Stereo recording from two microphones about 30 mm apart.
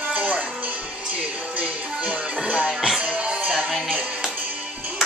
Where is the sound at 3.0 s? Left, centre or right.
Right.